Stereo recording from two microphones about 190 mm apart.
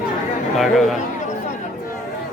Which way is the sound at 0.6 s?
Centre (ahead or behind).